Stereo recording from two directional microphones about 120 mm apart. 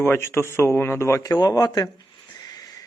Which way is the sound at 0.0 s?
20° left (ahead or behind).